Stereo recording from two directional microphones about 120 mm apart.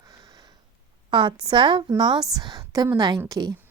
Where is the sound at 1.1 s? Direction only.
40° right (ahead or behind).